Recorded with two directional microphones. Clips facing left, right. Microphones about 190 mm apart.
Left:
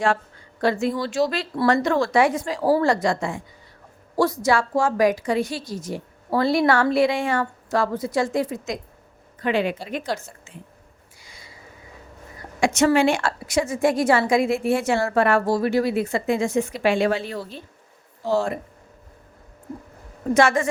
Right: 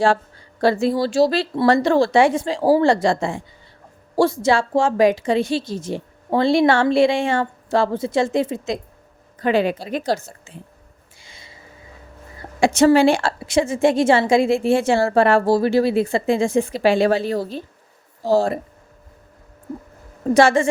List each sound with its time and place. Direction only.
0.6 s a woman's voice: 35° right (ahead or behind)
9.4 s speech: 35° right (ahead or behind)
11.2 s a sound: 25° right (ahead or behind)
12.4 s a woman's voice: 30° right (ahead or behind)
20.3 s a woman's voice: 30° right (ahead or behind)